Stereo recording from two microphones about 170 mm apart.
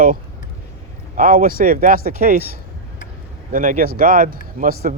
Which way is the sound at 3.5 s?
55° right (ahead or behind).